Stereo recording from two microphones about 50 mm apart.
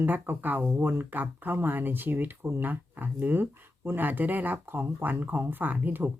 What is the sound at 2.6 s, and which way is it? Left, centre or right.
Speech, right.